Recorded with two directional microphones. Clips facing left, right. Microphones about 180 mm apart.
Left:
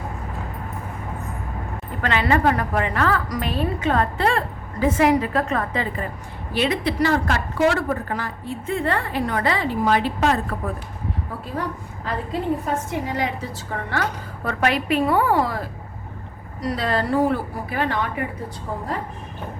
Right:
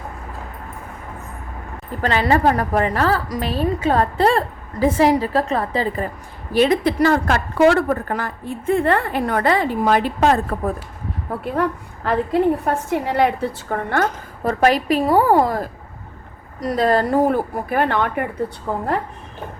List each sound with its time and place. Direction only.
2.0 s a woman's voice: 35° right (ahead or behind)
11.3 s a woman's voice: 60° right (ahead or behind)